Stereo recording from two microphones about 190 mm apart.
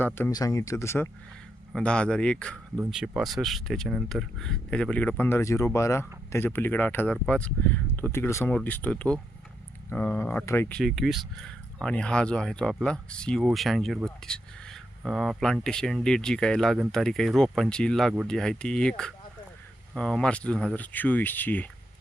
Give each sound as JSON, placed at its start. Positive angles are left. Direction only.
{"t": 0.0, "sound": "speech", "side_deg": 15}